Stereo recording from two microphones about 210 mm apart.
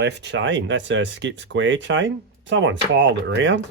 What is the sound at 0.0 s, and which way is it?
Speech, 55° right (ahead or behind).